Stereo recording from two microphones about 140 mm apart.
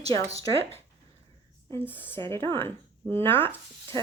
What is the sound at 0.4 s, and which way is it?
Speech, 15° left (ahead or behind).